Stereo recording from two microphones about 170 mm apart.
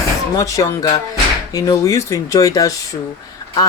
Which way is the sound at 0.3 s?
20° left (ahead or behind).